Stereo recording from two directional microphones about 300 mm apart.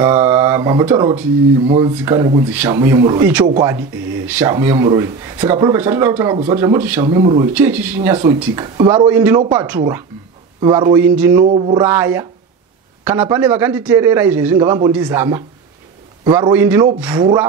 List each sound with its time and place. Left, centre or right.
0.0 s speech: centre
11.8 s speech: centre